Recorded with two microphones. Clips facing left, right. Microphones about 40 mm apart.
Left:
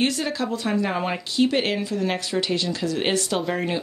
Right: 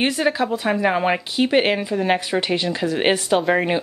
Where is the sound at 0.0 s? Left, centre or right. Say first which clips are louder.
Right 4 dB; right.